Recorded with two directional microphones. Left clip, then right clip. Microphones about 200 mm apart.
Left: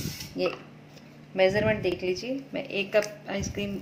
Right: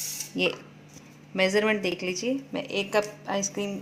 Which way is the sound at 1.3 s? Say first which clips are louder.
Even; 55° right (ahead or behind).